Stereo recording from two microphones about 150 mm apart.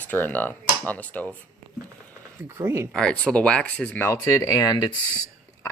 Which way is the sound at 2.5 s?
15° right (ahead or behind).